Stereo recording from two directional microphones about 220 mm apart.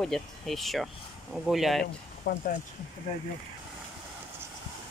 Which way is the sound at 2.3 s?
45° left (ahead or behind).